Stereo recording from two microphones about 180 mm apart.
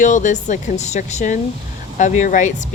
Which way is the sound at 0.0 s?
45° left (ahead or behind).